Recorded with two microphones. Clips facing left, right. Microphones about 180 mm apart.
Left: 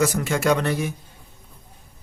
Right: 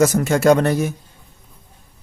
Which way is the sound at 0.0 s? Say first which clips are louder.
Right 6 dB; 45° right (ahead or behind).